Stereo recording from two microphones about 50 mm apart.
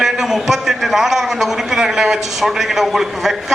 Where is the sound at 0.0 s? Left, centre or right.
Centre.